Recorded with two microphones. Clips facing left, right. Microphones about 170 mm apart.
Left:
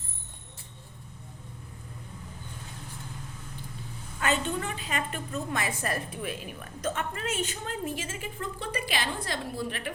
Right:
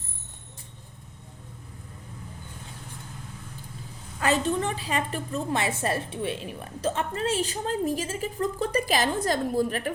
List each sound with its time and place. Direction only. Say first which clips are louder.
4.2 s a woman's voice: right 4 dB; 35° right (ahead or behind)